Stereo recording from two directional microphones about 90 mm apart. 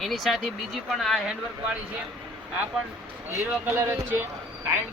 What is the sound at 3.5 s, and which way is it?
Speech, 20° right (ahead or behind).